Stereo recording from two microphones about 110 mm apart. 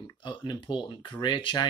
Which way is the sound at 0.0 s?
45° left (ahead or behind).